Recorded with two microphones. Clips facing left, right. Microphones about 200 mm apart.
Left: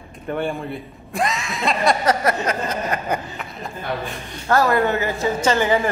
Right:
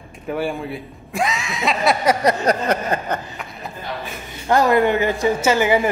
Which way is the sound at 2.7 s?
60° right (ahead or behind).